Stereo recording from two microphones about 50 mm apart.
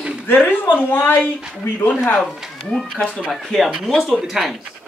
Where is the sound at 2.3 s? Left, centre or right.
Centre.